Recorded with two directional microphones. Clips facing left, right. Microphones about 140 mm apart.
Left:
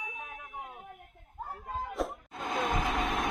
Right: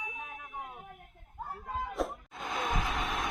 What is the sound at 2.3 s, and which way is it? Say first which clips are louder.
Music: left 3 dB; 45° left (ahead or behind).